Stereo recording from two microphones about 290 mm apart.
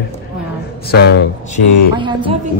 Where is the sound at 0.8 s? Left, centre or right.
Left.